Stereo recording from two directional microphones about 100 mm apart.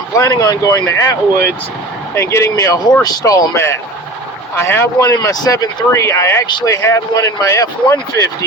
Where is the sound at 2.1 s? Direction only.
30° left (ahead or behind).